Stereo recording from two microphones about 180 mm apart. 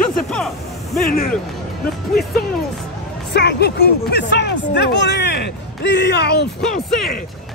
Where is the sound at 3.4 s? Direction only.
65° left (ahead or behind).